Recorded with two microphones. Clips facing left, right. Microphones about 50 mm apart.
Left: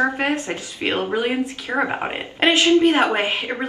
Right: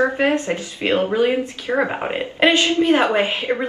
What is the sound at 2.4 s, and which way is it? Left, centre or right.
Speech, left.